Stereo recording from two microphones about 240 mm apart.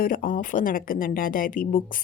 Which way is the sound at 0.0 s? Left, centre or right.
Left.